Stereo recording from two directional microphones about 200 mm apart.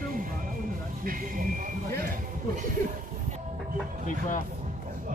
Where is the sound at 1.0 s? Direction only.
45° right (ahead or behind).